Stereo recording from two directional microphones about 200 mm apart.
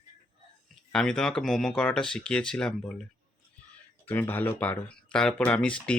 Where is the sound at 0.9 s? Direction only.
5° left (ahead or behind).